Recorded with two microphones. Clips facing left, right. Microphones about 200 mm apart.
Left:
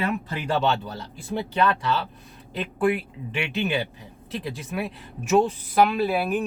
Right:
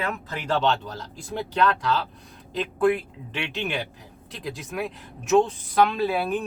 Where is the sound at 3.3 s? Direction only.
5° left (ahead or behind).